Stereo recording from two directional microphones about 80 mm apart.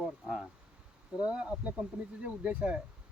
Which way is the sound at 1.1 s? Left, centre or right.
Centre.